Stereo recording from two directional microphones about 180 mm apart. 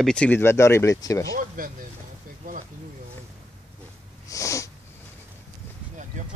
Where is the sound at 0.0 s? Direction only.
5° left (ahead or behind).